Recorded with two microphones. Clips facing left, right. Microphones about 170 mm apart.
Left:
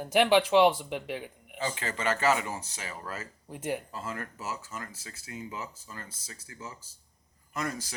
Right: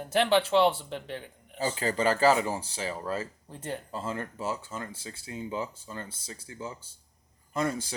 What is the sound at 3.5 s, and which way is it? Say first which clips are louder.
Speech: left 4 dB; 10° left (ahead or behind).